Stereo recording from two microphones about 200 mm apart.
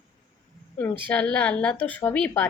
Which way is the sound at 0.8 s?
10° left (ahead or behind).